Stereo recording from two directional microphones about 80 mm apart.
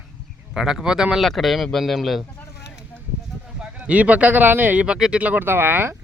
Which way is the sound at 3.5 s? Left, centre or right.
Centre.